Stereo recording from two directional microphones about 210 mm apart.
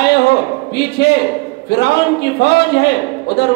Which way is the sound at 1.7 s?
50° left (ahead or behind).